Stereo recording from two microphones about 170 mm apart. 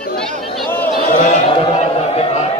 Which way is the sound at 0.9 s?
50° left (ahead or behind).